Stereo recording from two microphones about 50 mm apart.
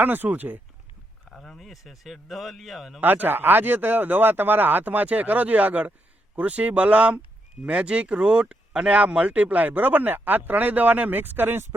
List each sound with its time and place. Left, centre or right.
0.0 s speech: right
1.3 s speech: centre
3.0 s speech: right